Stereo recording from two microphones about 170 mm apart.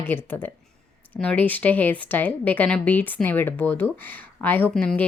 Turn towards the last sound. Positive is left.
turn(degrees=5)  # may be behind; listen again after turning